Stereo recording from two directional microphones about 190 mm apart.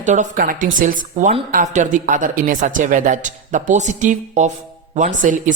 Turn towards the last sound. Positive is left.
turn(degrees=-40)  # may be behind; listen again after turning